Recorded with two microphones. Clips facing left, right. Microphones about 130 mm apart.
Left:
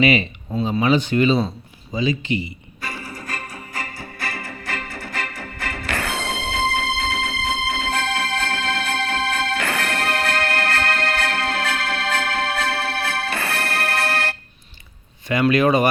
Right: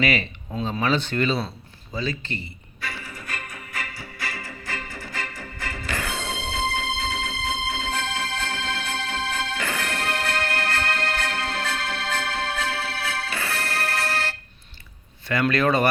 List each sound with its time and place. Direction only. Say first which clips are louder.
0.0 s speech: left 6 dB; 20° left (ahead or behind)
2.8 s music: left 3 dB; 40° left (ahead or behind); by 14.3 s 60° left (ahead or behind)
15.3 s speech: left 4 dB; 15° left (ahead or behind)